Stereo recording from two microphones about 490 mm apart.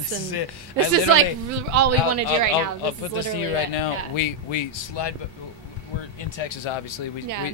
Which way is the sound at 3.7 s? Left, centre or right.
Left.